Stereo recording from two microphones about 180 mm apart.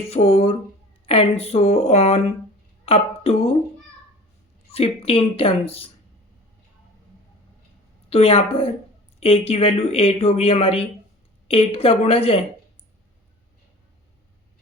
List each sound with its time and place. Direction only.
0.0 s speech: 35° left (ahead or behind)
4.7 s speech: 35° left (ahead or behind)
8.1 s speech: 35° left (ahead or behind)